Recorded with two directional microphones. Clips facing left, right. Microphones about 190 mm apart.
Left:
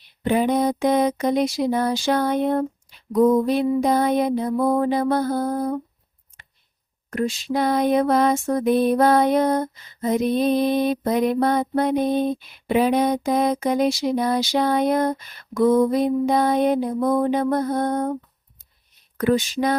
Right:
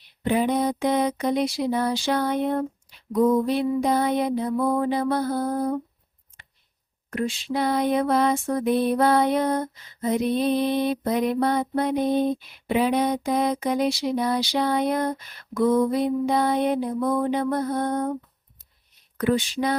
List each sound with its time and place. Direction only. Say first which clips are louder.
0.3 s mantra: left 3 dB; 45° left (ahead or behind)
7.1 s mantra: left 3 dB; 40° left (ahead or behind)
19.1 s mantra: left 3 dB; 45° left (ahead or behind)